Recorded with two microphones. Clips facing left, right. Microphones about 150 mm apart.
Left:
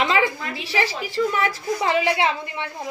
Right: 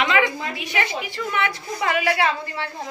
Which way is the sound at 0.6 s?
30° left (ahead or behind).